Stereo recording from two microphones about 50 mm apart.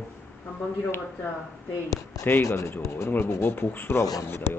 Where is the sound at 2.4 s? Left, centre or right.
Left.